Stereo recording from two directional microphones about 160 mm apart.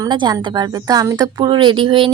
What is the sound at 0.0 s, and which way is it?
A woman's voice, 25° right (ahead or behind).